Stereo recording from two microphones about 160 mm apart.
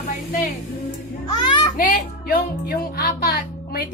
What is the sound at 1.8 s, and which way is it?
Speech, 65° left (ahead or behind).